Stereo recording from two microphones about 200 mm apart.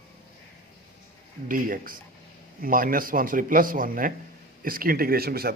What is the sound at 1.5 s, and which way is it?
A man's voice, 45° right (ahead or behind).